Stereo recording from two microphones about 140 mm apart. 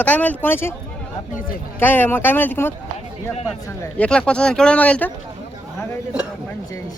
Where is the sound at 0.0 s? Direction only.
10° left (ahead or behind).